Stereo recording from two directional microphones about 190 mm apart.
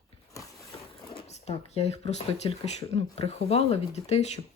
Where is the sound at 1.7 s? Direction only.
35° left (ahead or behind).